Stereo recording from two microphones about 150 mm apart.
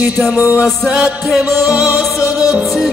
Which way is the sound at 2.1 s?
20° left (ahead or behind).